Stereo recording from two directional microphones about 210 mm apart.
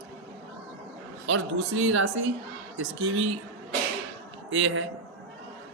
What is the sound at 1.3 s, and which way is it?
A woman's voice, 70° right (ahead or behind).